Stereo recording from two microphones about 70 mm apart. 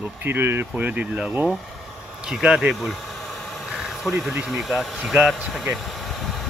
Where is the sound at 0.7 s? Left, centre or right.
Centre.